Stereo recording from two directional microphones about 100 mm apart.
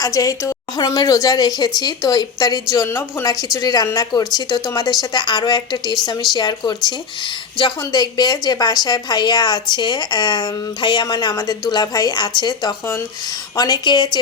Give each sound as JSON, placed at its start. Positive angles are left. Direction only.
{"t": 0.0, "sound": "a woman's voice", "side_deg": 35}
{"t": 2.8, "sound": "a woman's voice", "side_deg": 25}
{"t": 3.2, "sound": "a woman's voice", "side_deg": 40}
{"t": 7.8, "sound": "a woman's voice", "side_deg": 40}